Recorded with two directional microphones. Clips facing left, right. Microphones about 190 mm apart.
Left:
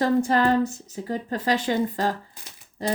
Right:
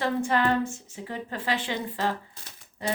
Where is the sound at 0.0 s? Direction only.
40° left (ahead or behind).